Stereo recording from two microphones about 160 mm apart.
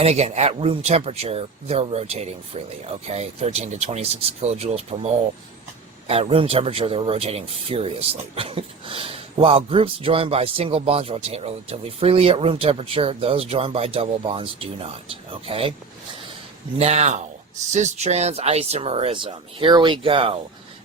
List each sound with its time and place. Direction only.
0.0 s speech: 40° right (ahead or behind)
16.7 s speech: 40° right (ahead or behind)